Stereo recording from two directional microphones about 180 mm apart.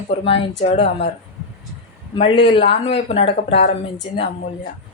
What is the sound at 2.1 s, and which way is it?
Speech, 30° left (ahead or behind).